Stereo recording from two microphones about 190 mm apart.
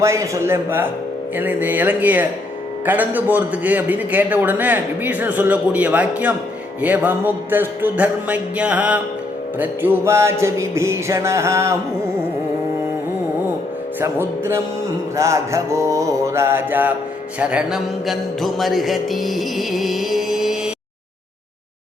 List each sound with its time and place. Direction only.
0.0 s a man's voice: 15° right (ahead or behind)
14.0 s a man's voice: 15° right (ahead or behind)
17.4 s music: 5° right (ahead or behind)